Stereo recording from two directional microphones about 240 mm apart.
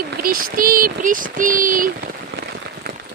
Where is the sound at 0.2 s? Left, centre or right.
Right.